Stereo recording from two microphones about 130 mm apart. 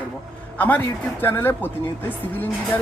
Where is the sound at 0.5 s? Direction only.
15° left (ahead or behind).